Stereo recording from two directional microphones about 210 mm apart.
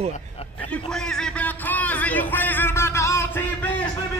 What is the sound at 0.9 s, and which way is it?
Music, 5° left (ahead or behind).